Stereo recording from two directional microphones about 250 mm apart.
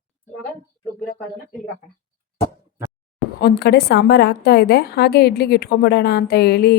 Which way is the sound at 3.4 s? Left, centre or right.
Left.